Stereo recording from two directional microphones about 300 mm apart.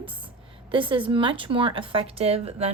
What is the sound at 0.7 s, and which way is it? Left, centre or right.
A woman's voice, centre.